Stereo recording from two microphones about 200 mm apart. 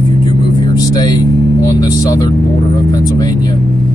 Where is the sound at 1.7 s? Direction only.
20° left (ahead or behind).